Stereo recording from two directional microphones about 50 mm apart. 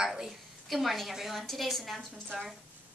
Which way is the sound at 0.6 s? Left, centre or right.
Centre.